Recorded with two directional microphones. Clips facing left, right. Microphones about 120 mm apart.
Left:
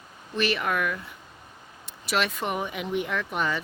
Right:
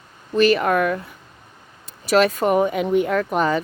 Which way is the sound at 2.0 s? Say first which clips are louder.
Right 11 dB; 40° right (ahead or behind).